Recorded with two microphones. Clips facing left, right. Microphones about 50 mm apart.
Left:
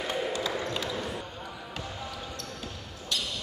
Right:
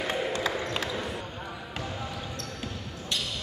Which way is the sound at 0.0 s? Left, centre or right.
Right.